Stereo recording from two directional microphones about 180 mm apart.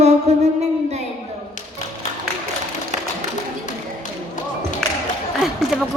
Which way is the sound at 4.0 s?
45° left (ahead or behind).